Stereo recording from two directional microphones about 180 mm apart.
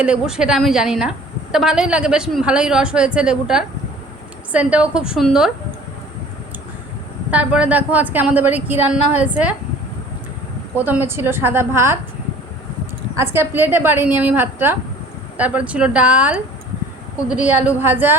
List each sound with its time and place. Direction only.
0.0 s a woman's voice: 5° right (ahead or behind)
7.3 s a woman's voice: 5° right (ahead or behind)
10.8 s a woman's voice: 10° right (ahead or behind)
13.1 s a woman's voice: 15° right (ahead or behind)